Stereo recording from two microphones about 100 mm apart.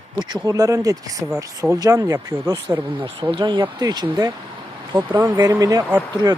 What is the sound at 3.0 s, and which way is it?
Speech, 55° right (ahead or behind).